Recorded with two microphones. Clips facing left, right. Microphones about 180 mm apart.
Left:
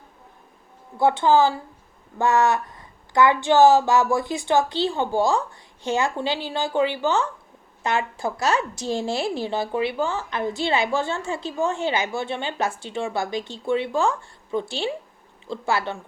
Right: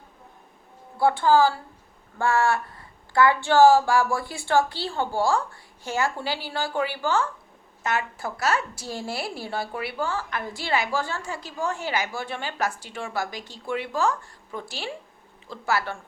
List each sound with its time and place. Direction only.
0.9 s a woman's voice: 20° left (ahead or behind)